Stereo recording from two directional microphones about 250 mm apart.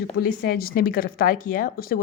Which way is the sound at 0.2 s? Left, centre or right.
Left.